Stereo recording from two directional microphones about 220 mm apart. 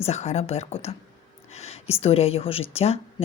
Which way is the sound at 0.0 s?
30° left (ahead or behind).